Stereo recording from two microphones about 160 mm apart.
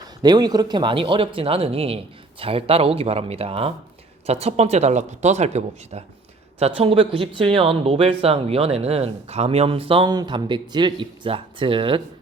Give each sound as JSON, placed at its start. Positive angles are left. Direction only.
{"t": 0.2, "sound": "speech", "side_deg": -25}